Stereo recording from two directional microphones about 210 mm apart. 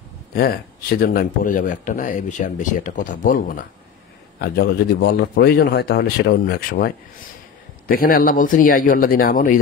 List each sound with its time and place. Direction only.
0.3 s speech: 45° left (ahead or behind)